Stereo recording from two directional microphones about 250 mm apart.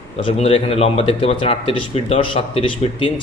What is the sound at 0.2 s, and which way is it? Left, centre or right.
Speech, left.